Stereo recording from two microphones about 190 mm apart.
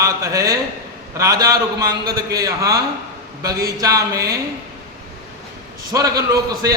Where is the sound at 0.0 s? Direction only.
15° right (ahead or behind).